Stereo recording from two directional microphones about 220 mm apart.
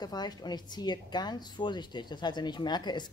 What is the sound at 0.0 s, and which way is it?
A woman's voice, 20° left (ahead or behind).